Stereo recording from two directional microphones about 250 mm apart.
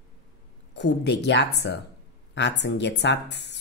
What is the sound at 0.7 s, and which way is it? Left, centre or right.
Speech, left.